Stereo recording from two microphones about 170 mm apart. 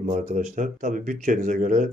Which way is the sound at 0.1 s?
45° right (ahead or behind).